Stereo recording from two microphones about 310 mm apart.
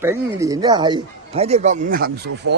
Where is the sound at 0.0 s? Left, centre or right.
Centre.